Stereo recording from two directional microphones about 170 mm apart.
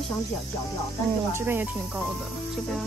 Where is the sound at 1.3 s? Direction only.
10° right (ahead or behind).